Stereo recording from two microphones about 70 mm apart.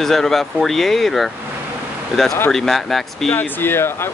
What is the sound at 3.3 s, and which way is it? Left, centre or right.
Speech, left.